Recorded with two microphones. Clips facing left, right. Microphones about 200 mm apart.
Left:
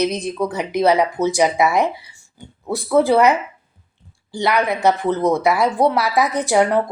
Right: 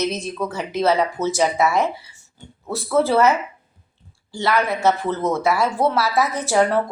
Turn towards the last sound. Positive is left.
turn(degrees=15)  # may be behind; listen again after turning